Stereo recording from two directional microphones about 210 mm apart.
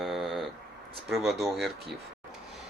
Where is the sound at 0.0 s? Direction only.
Centre (ahead or behind).